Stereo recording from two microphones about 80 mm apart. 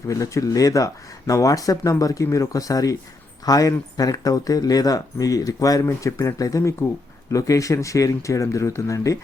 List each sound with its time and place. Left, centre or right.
0.1 s speech: left